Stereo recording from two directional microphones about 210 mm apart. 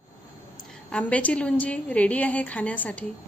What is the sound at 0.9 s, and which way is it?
A woman's voice, 5° left (ahead or behind).